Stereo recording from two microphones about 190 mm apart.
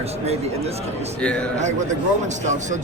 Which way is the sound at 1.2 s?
5° left (ahead or behind).